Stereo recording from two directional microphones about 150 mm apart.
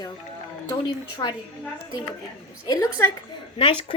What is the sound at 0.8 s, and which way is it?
Speech, 30° left (ahead or behind).